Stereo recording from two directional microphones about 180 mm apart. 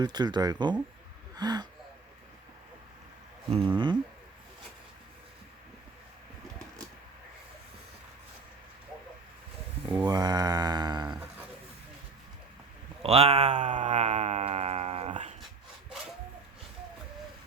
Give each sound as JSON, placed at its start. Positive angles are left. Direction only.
{"t": 0.0, "sound": "speech", "side_deg": -25}
{"t": 3.5, "sound": "speech", "side_deg": -30}
{"t": 10.0, "sound": "mantra", "side_deg": -20}
{"t": 13.0, "sound": "a sound", "side_deg": -35}